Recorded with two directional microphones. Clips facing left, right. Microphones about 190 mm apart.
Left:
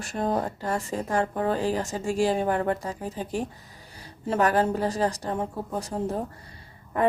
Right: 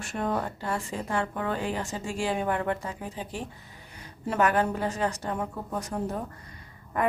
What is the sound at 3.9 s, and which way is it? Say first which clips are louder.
A woman's voice: left 2 dB; 35° left (ahead or behind).